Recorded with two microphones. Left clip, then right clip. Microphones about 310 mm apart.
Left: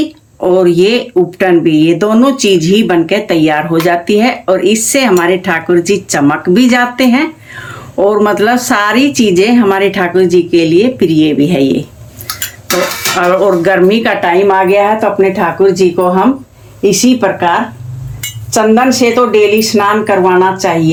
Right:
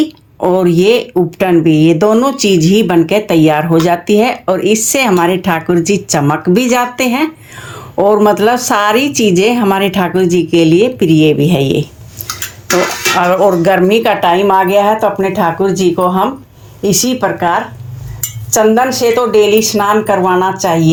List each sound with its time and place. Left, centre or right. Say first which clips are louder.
0.3 s speech: left 2 dB; right
13.1 s speech: left 1 dB; right